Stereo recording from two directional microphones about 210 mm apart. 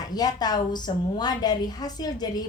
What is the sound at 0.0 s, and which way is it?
A woman's voice, 20° left (ahead or behind).